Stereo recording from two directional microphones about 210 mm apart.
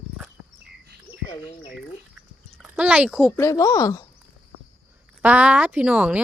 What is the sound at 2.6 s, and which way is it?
Speech, 5° right (ahead or behind).